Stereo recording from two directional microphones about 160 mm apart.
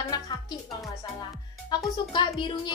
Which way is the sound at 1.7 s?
25° left (ahead or behind).